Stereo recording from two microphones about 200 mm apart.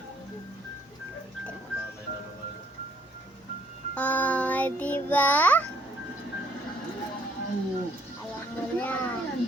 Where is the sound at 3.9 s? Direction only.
5° left (ahead or behind).